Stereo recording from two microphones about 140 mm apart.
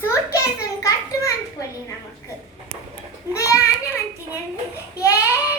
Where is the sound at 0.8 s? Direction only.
20° left (ahead or behind).